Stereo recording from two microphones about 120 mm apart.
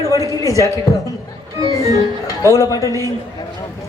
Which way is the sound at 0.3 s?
30° left (ahead or behind).